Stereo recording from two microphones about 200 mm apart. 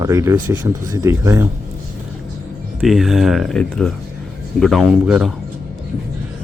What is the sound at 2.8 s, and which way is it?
Speech, centre (ahead or behind).